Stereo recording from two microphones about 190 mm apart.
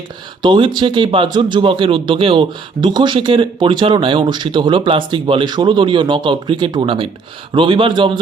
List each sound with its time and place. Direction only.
0.4 s speech: 25° right (ahead or behind)